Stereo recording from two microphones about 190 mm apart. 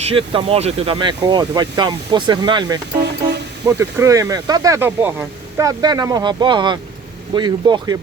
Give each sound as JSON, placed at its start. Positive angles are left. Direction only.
{"t": 0.0, "sound": "speech", "side_deg": -30}